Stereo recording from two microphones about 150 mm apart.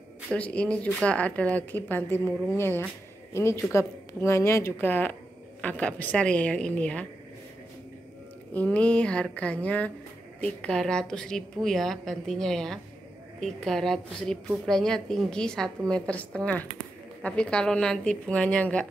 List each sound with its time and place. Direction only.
0.3 s speech: 10° left (ahead or behind)
8.5 s a woman's voice: 10° left (ahead or behind)